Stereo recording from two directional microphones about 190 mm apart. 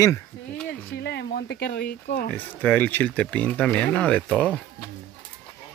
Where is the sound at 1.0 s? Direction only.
60° left (ahead or behind).